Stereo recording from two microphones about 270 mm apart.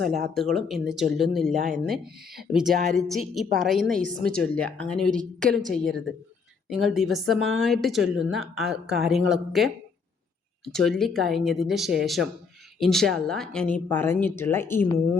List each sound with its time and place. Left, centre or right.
0.3 s a woman's voice: centre